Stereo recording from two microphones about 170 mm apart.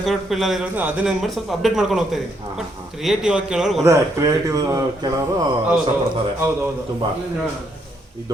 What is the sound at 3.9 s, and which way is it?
Speech, 20° right (ahead or behind).